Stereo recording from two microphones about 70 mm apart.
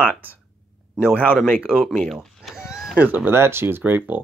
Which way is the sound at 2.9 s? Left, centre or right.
Right.